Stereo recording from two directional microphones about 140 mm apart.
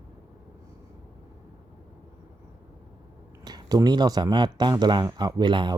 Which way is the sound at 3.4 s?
30° right (ahead or behind).